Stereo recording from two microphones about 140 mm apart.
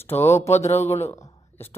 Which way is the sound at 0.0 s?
15° left (ahead or behind).